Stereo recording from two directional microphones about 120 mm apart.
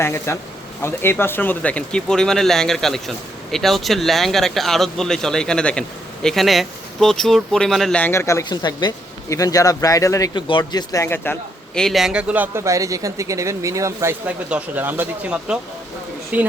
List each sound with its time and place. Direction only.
0.0 s speech: 20° left (ahead or behind); by 8.0 s centre (ahead or behind)
8.0 s speech: 20° left (ahead or behind)
8.4 s speech: 40° left (ahead or behind)
11.0 s speech: 20° left (ahead or behind)
11.7 s speech: 5° left (ahead or behind); by 12.6 s 15° right (ahead or behind)
12.6 s speech: 25° right (ahead or behind)